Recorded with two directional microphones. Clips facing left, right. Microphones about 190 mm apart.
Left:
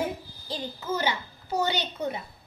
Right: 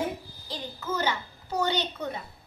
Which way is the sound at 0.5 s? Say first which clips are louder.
Left 2 dB; 10° left (ahead or behind).